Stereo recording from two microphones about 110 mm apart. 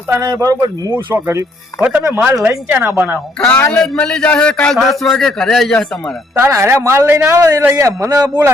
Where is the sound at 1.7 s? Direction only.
30° left (ahead or behind).